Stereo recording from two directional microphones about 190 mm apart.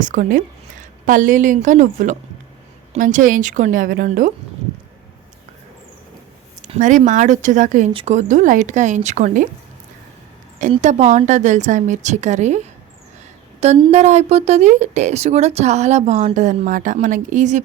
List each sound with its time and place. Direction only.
0.0 s a woman's voice: 45° right (ahead or behind)
6.6 s speech: 40° right (ahead or behind)
10.6 s speech: 40° right (ahead or behind)